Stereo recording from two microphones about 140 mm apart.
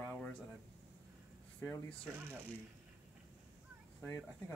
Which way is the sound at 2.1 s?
10° right (ahead or behind).